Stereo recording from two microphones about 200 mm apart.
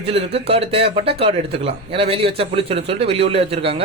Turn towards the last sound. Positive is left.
turn(degrees=-30)  # may be behind; listen again after turning